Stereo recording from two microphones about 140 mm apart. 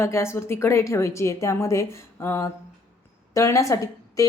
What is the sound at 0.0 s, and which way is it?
A woman's voice, 20° left (ahead or behind).